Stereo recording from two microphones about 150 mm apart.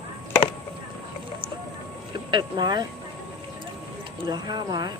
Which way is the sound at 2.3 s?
30° right (ahead or behind).